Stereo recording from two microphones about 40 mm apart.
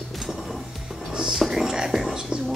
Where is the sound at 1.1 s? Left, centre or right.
Centre.